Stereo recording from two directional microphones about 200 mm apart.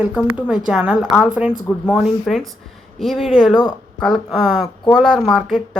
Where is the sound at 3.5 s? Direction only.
20° left (ahead or behind).